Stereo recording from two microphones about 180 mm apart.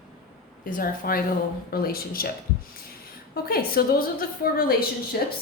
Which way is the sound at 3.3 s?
55° left (ahead or behind).